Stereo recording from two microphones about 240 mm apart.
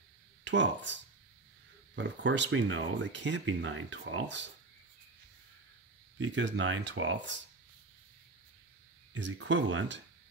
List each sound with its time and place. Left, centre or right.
0.4 s speech: right
2.0 s speech: right
6.1 s speech: right
9.1 s speech: right